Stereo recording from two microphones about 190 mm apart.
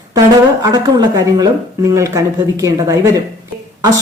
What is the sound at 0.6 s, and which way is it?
A woman's voice, 20° right (ahead or behind).